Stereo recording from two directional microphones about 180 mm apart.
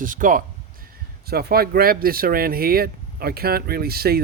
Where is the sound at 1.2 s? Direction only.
55° right (ahead or behind).